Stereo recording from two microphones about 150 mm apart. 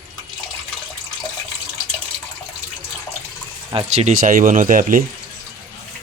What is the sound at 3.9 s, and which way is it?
Speech, 55° right (ahead or behind).